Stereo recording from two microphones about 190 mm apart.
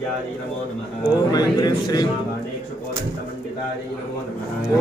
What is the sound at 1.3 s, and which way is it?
Speech, 20° left (ahead or behind).